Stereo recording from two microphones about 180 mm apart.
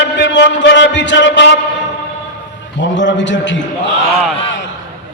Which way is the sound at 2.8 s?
90° left.